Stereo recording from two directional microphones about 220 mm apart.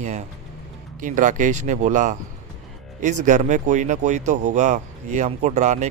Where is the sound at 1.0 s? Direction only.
35° right (ahead or behind).